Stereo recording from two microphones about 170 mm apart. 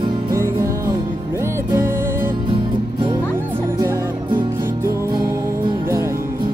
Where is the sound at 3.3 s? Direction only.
15° right (ahead or behind).